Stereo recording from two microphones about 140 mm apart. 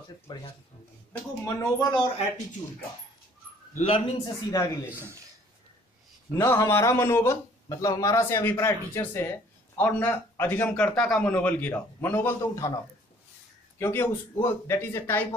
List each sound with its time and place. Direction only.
0.3 s speech: 30° left (ahead or behind)
3.7 s speech: 50° left (ahead or behind)
4.5 s speech: 30° left (ahead or behind)
4.8 s a man's voice: 20° right (ahead or behind)
6.3 s a man's voice: 20° left (ahead or behind)
13.7 s a man's voice: 15° left (ahead or behind)